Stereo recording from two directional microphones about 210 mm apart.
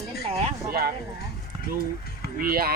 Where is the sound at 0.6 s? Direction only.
45° right (ahead or behind).